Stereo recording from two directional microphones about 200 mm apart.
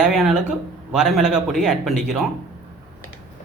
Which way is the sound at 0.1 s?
Centre (ahead or behind).